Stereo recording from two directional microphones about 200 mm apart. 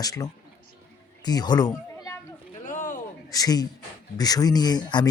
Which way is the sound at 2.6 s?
40° left (ahead or behind).